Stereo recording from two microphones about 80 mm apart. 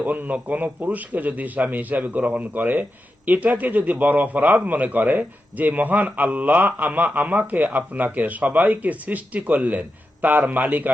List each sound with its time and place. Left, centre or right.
0.0 s a man's voice: right